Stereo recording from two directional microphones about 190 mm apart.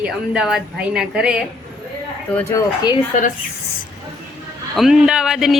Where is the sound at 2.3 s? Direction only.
15° left (ahead or behind).